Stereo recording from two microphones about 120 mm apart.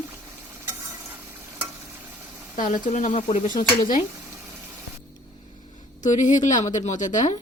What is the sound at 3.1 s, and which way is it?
Speech, 70° left (ahead or behind).